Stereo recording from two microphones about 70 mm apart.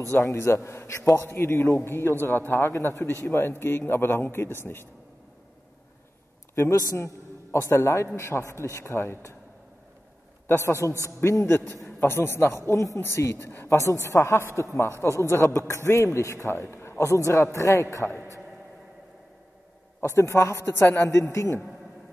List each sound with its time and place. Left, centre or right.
0.3 s a man's voice: left
6.7 s a man's voice: left
10.4 s a man's voice: left
20.0 s a man's voice: left